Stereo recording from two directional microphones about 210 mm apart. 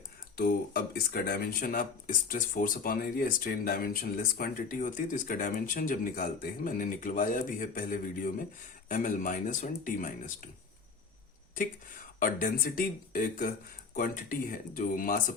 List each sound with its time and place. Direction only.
0.3 s speech: 45° left (ahead or behind)
12.2 s speech: 40° left (ahead or behind)